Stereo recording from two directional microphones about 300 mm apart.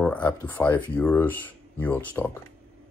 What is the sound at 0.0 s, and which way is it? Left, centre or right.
Speech, centre.